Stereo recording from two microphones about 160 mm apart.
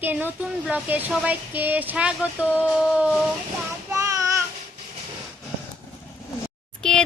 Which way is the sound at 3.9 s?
20° right (ahead or behind).